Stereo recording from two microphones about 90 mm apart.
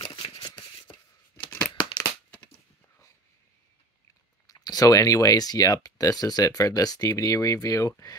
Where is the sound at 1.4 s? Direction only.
30° left (ahead or behind).